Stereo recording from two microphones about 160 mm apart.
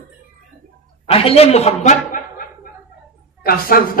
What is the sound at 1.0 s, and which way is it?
A man's voice, 35° left (ahead or behind).